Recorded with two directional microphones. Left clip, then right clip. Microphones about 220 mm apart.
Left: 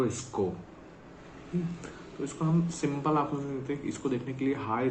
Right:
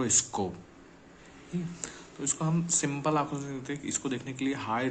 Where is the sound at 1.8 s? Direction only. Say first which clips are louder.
Left 2 dB; 35° right (ahead or behind).